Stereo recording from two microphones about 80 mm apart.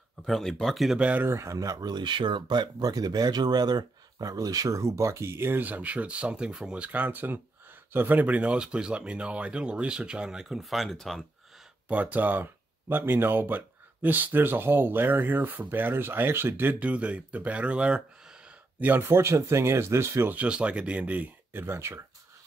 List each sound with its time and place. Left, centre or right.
0.3 s speech: centre
0.9 s speech: centre
1.2 s speech: right; by 11.2 s centre
11.9 s speech: centre
20.3 s speech: centre
21.6 s speech: right